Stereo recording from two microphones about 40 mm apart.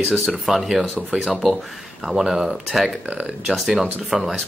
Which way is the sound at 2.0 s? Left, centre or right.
Centre.